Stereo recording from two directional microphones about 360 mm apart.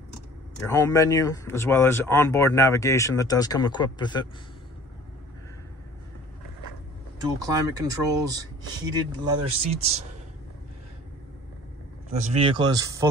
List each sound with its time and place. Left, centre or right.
0.7 s speech: centre
7.2 s speech: centre
12.1 s speech: centre